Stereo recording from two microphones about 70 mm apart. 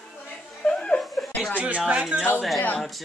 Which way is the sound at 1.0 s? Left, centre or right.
Centre.